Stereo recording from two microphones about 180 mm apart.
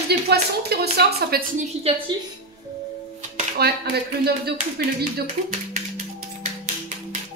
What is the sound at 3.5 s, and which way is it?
Speech, 60° right (ahead or behind).